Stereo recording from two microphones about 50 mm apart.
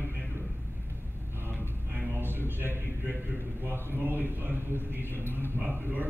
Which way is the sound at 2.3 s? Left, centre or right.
Right.